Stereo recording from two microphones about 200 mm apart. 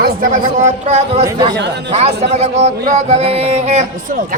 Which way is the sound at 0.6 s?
35° right (ahead or behind).